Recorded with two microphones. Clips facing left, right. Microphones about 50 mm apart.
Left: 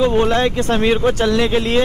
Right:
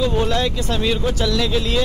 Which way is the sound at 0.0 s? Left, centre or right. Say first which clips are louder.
Left 5 dB; left.